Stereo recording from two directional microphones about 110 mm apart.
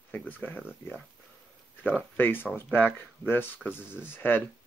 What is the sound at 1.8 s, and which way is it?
Speech, 15° left (ahead or behind).